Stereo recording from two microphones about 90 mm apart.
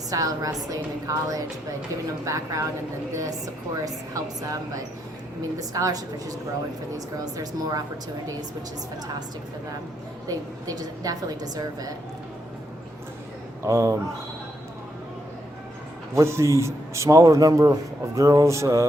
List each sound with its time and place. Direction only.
0.1 s a man's voice: 40° right (ahead or behind)
5.7 s a man's voice: 40° right (ahead or behind)
10.2 s a woman's voice: 45° right (ahead or behind)
13.7 s a man's voice: 35° right (ahead or behind)
16.1 s a man's voice: 30° right (ahead or behind)